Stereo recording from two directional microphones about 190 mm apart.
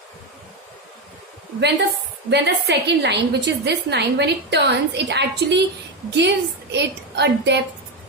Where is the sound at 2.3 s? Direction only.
65° right (ahead or behind).